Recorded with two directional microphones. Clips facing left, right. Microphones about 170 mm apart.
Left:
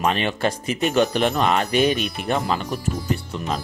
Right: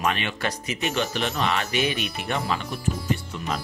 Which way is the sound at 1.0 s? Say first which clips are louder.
Left 8 dB; 50° left (ahead or behind).